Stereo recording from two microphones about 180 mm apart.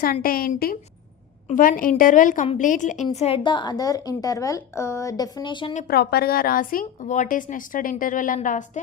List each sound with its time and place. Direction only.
0.0 s a woman's voice: 55° left (ahead or behind); by 5.7 s 25° left (ahead or behind)
5.9 s a woman's voice: 60° left (ahead or behind); by 8.8 s 45° left (ahead or behind)